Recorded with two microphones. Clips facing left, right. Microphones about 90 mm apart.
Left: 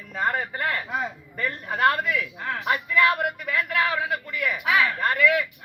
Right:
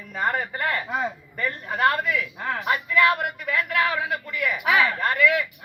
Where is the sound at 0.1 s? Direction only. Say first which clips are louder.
Even; 5° right (ahead or behind).